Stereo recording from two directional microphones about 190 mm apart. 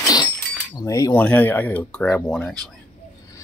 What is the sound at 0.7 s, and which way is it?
Speech, 20° left (ahead or behind).